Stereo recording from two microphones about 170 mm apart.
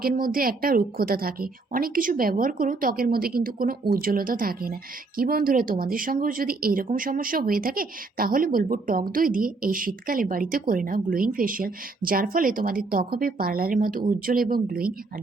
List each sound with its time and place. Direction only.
0.0 s a woman's voice: 55° right (ahead or behind)